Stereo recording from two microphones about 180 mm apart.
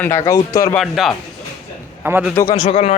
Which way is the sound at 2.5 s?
35° left (ahead or behind).